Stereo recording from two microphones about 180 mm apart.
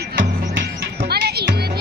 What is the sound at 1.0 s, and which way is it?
Music, 60° right (ahead or behind).